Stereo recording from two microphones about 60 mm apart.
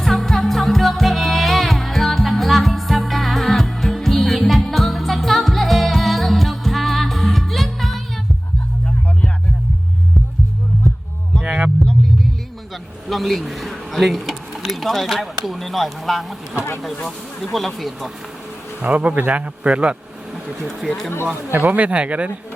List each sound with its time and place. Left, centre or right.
0.0 s music: centre
11.4 s music: centre
12.7 s vehicle: centre
15.4 s speech: centre
18.8 s speech: right